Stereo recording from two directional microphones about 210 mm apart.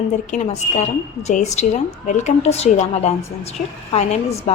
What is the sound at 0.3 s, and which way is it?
A woman's voice, 35° left (ahead or behind).